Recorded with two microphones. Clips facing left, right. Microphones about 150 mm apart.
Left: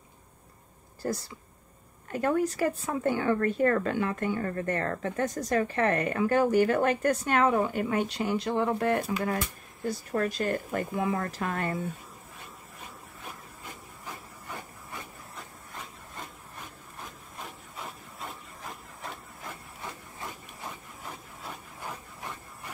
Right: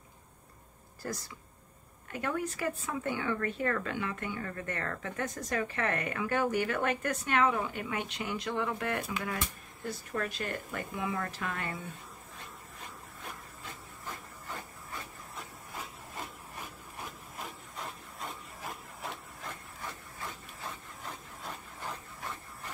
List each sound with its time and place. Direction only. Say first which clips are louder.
1.0 s speech: left 7 dB; 30° left (ahead or behind)
2.1 s speech: left 8 dB; 40° left (ahead or behind)
17.4 s wood: left 1 dB; centre (ahead or behind)
21.0 s a sound: left 1 dB; 10° left (ahead or behind)